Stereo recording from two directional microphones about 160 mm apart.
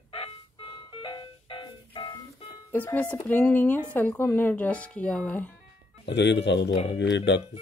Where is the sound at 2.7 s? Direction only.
10° left (ahead or behind).